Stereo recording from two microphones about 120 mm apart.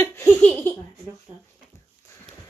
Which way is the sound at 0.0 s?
20° left (ahead or behind).